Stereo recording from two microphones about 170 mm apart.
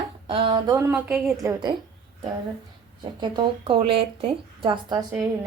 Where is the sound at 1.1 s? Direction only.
Centre (ahead or behind).